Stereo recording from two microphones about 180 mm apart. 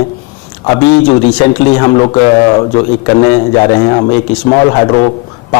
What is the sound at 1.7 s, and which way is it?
A man's voice, 25° left (ahead or behind).